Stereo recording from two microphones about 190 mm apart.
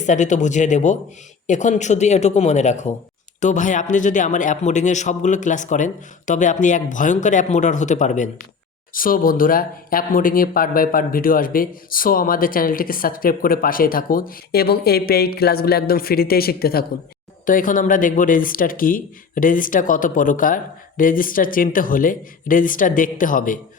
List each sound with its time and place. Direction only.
0.0 s speech: 40° left (ahead or behind)